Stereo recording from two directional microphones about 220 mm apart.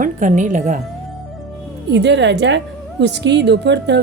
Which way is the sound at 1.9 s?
50° right (ahead or behind).